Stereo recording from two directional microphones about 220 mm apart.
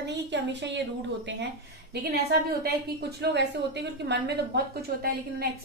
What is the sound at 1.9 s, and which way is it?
A woman's voice, 45° right (ahead or behind).